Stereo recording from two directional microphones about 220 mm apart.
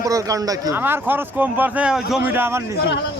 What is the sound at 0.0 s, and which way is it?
Speech, 15° right (ahead or behind).